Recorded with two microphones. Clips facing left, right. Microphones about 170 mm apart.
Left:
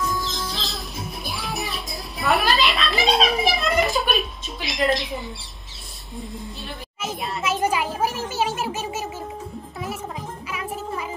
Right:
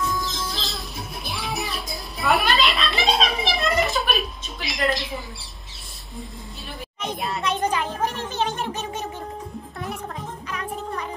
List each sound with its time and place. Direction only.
0.1 s music: centre (ahead or behind)
7.0 s children playing: 5° left (ahead or behind)
10.5 s music: 5° left (ahead or behind)